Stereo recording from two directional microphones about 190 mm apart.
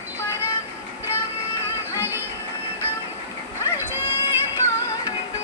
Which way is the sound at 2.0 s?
10° right (ahead or behind).